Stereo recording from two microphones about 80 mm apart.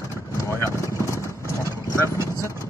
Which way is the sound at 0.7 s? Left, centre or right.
Right.